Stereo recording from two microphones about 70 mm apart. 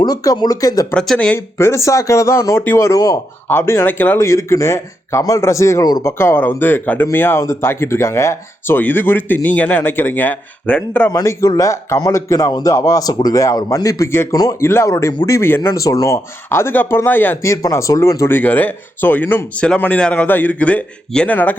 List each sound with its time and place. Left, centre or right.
0.0 s speech: left
0.9 s speech: centre
1.5 s a man's voice: left
4.2 s a man's voice: left
10.7 s speech: centre
11.1 s a man's voice: left
13.4 s a man's voice: left
14.1 s speech: left
15.7 s speech: left
17.4 s a man's voice: left
18.3 s speech: left
19.8 s speech: centre
20.1 s speech: left